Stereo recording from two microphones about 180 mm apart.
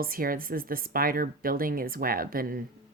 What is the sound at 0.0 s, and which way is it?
Speech, 55° right (ahead or behind).